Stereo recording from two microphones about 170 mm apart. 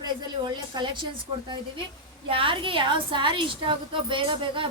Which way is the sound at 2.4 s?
30° right (ahead or behind).